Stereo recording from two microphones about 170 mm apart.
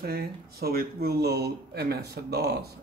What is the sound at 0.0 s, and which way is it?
Speech, 65° right (ahead or behind).